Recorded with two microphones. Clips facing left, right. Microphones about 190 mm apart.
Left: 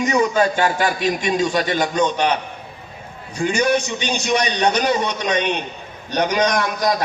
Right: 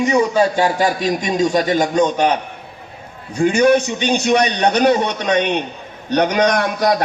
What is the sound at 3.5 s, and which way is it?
A man's voice, 55° right (ahead or behind).